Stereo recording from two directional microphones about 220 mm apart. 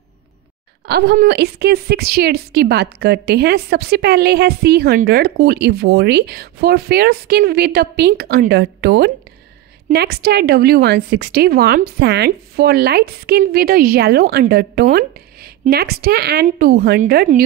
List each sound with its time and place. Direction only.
0.8 s a woman's voice: 45° right (ahead or behind)